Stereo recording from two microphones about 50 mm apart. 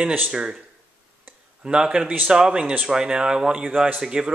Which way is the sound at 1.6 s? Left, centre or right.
Centre.